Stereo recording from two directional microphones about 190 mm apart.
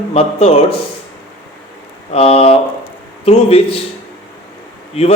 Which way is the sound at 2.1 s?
30° left (ahead or behind).